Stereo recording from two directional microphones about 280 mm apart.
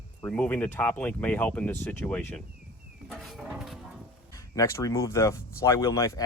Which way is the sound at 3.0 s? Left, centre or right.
Centre.